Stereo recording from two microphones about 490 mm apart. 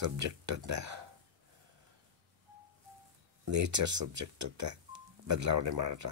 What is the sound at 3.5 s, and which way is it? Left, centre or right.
Speech, right.